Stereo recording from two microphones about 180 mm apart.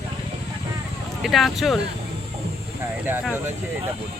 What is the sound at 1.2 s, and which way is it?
Speech, centre (ahead or behind).